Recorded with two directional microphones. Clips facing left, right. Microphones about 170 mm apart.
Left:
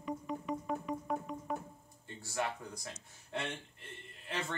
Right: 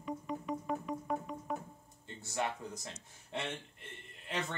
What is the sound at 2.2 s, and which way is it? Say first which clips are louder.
Speech: right 1 dB; 20° right (ahead or behind).